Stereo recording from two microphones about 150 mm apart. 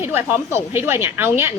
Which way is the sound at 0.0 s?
15° right (ahead or behind).